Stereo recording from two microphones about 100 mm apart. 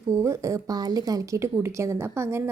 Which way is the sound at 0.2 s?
30° right (ahead or behind).